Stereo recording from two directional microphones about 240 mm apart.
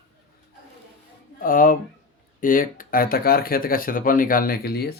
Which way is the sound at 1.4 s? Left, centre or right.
Left.